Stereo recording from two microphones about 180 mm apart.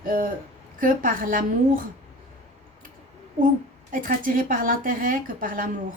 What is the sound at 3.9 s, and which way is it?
Speech, 50° right (ahead or behind).